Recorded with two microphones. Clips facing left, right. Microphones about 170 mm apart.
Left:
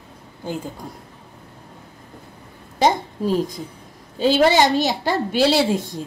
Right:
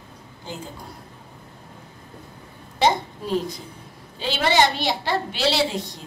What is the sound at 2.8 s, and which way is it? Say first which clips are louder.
A woman's voice: left 3 dB; 45° left (ahead or behind).